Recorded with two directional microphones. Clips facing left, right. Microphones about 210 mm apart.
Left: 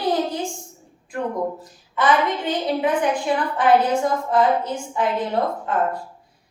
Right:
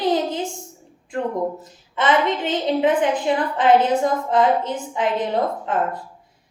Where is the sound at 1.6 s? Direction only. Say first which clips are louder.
Left 1 dB; 20° right (ahead or behind).